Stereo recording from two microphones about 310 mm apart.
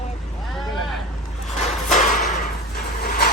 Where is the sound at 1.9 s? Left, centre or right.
Left.